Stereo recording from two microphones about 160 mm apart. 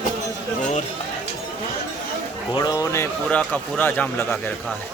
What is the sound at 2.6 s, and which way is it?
A man's voice, 20° left (ahead or behind).